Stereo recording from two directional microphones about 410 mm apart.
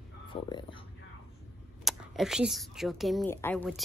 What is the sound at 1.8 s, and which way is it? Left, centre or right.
A woman's voice, centre.